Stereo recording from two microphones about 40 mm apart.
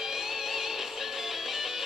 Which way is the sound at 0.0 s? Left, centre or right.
Centre.